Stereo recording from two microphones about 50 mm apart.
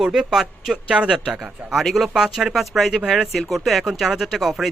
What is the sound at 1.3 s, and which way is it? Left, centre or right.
Speech, centre.